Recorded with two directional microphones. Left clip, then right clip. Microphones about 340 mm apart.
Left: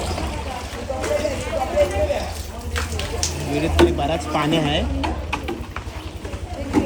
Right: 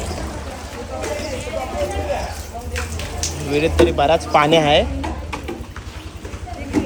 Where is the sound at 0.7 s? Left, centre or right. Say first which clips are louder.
Left 3 dB; centre.